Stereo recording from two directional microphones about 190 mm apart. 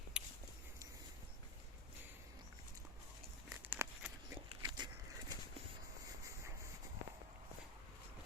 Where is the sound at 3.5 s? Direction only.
10° right (ahead or behind).